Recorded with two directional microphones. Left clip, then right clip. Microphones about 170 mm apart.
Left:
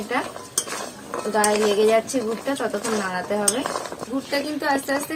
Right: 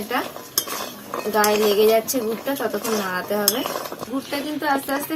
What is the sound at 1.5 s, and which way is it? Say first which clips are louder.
Speech: right 2 dB; 5° left (ahead or behind).